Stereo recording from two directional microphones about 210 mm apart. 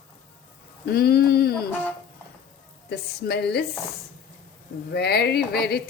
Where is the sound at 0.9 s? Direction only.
50° left (ahead or behind).